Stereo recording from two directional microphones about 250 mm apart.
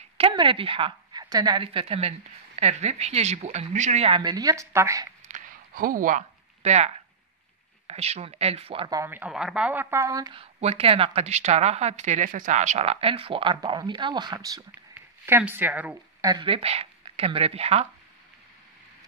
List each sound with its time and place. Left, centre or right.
0.2 s a woman's voice: centre
5.3 s a sound: right
7.8 s speech: right